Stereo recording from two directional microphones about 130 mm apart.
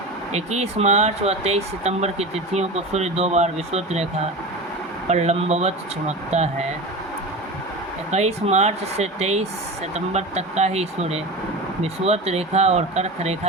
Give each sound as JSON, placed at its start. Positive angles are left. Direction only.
{"t": 0.3, "sound": "speech", "side_deg": -55}
{"t": 5.0, "sound": "speech", "side_deg": -60}
{"t": 8.1, "sound": "speech", "side_deg": -60}